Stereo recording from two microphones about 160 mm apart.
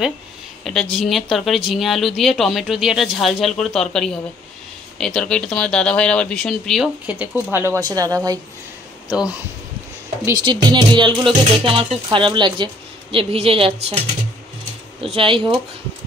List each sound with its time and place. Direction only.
0.9 s speech: centre (ahead or behind)
7.1 s speech: 10° right (ahead or behind)
10.2 s a woman's voice: 25° right (ahead or behind)
15.0 s a woman's voice: 35° right (ahead or behind)